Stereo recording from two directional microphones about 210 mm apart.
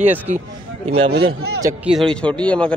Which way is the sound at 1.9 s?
Centre (ahead or behind).